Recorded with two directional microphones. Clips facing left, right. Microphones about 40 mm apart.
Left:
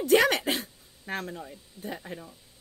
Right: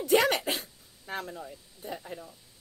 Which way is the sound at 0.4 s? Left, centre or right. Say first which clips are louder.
Left 3 dB; left.